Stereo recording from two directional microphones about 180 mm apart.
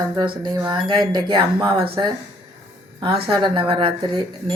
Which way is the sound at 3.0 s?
30° right (ahead or behind).